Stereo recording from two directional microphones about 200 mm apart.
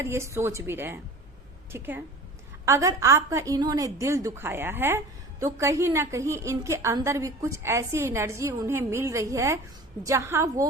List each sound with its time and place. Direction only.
0.0 s a woman's voice: 15° right (ahead or behind)